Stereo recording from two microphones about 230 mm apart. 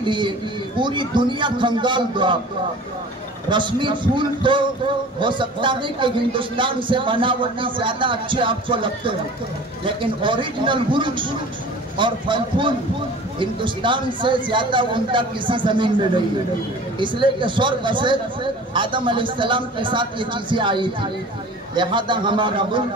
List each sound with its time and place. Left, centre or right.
0.0 s a man's voice: centre
3.4 s a man's voice: right